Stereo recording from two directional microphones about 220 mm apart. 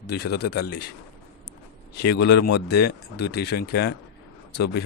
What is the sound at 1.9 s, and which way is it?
Speech, 50° left (ahead or behind).